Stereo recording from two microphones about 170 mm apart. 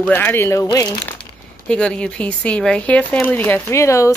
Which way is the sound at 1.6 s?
5° left (ahead or behind).